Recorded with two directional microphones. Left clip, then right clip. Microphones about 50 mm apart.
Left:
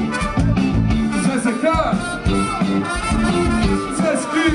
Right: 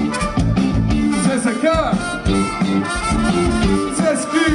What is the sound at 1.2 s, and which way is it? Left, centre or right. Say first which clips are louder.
Music: even; centre.